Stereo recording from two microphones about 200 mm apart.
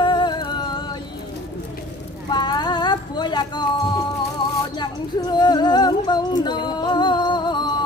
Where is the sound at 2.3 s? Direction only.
20° left (ahead or behind).